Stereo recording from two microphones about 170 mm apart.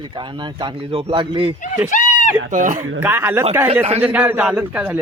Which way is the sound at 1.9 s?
50° left (ahead or behind).